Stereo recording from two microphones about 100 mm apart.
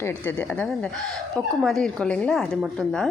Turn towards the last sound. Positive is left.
turn(degrees=5)  # may be behind; listen again after turning